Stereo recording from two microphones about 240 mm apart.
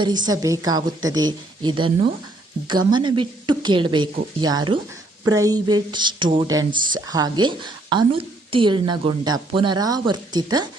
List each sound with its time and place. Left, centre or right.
0.0 s a woman's voice: centre